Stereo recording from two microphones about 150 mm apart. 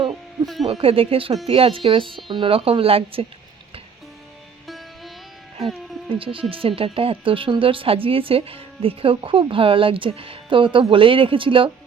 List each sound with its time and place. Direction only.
0.6 s speech: 40° right (ahead or behind)
4.6 s music: centre (ahead or behind)
6.1 s speech: 35° right (ahead or behind)